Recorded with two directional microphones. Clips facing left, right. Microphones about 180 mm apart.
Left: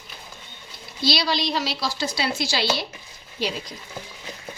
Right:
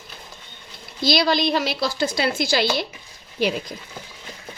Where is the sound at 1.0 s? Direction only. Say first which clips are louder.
Right 4 dB; 50° right (ahead or behind).